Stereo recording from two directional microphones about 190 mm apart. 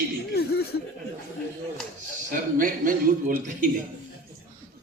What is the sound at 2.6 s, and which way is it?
Speech, 45° right (ahead or behind).